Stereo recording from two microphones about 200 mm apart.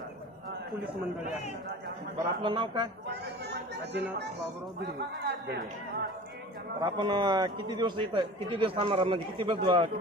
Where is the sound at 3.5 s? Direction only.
55° right (ahead or behind).